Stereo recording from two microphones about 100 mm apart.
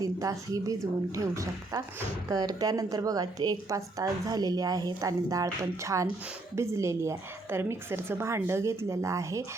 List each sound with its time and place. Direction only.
0.0 s a woman's voice: 35° right (ahead or behind)